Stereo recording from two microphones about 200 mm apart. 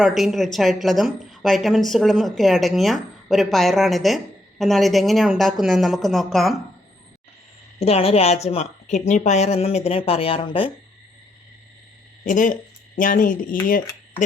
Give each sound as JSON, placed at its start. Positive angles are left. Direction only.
{"t": 0.0, "sound": "a woman's voice", "side_deg": 0}
{"t": 7.8, "sound": "a woman's voice", "side_deg": 30}
{"t": 12.2, "sound": "a woman's voice", "side_deg": 40}